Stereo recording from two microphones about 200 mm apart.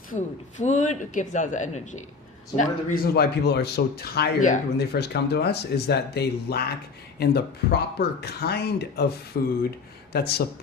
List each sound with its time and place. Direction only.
0.1 s speech: 35° left (ahead or behind)
4.9 s speech: 55° left (ahead or behind)